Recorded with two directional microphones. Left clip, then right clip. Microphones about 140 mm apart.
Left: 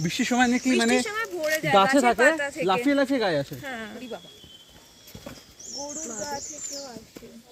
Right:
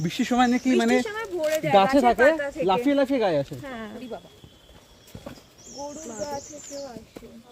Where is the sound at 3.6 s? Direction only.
35° right (ahead or behind).